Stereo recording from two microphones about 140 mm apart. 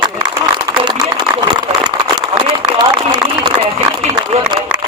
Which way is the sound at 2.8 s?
30° right (ahead or behind).